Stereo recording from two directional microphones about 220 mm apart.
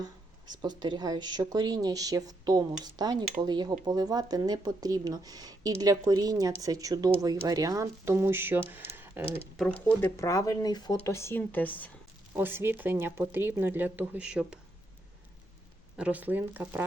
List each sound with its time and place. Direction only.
0.0 s speech: 20° right (ahead or behind)
9.8 s speech: 10° left (ahead or behind)
12.4 s speech: 10° right (ahead or behind)
16.0 s speech: 5° right (ahead or behind)